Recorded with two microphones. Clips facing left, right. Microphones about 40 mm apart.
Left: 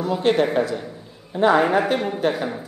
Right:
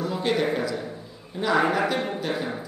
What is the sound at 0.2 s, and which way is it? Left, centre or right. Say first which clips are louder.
A man's voice: left 6 dB; left.